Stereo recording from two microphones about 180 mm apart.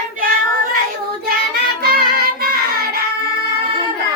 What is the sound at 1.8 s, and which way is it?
Child singing, 55° right (ahead or behind).